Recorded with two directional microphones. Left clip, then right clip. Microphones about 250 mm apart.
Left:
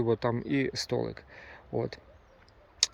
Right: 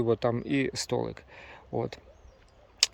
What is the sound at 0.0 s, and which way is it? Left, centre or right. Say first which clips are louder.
Speech: right 2 dB; centre.